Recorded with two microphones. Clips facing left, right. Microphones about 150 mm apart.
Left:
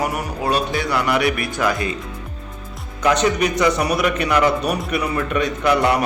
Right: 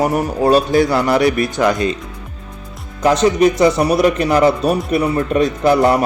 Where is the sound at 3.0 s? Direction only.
30° right (ahead or behind).